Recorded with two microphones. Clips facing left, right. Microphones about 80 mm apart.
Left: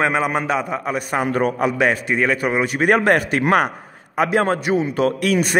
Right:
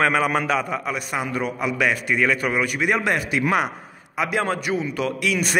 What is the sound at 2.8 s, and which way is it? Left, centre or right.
A man's voice, left.